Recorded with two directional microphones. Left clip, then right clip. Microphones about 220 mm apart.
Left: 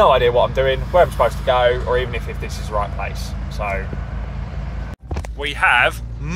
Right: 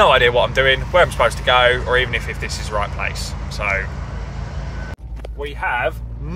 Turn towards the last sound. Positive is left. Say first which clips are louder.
# left 6 dB
turn(degrees=-10)  # may be behind; listen again after turning